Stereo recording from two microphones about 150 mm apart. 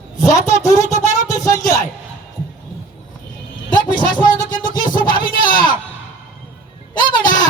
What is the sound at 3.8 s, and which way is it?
Vehicle, 30° left (ahead or behind).